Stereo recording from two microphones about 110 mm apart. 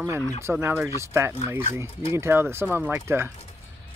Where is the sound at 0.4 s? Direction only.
25° right (ahead or behind).